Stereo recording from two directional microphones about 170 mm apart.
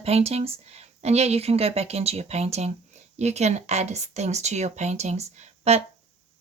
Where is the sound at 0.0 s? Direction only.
35° right (ahead or behind).